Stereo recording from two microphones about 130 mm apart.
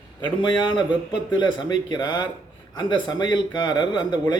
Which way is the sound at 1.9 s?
35° left (ahead or behind).